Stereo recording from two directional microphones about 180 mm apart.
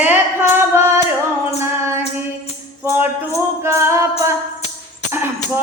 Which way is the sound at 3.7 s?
15° right (ahead or behind).